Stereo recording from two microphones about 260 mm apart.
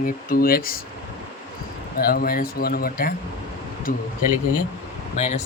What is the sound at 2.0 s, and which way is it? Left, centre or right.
Speech, left.